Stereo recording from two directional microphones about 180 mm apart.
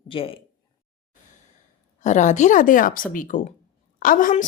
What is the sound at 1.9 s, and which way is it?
A woman's voice, 40° left (ahead or behind).